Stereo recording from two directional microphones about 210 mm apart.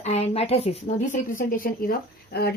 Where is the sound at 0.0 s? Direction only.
30° left (ahead or behind).